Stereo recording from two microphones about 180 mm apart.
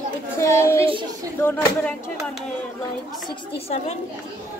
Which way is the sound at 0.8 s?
30° right (ahead or behind).